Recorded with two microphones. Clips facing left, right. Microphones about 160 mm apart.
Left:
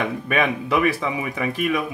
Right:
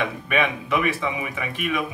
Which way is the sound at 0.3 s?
35° left (ahead or behind).